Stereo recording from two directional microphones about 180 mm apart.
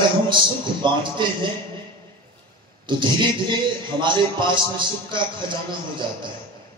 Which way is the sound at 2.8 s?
25° right (ahead or behind).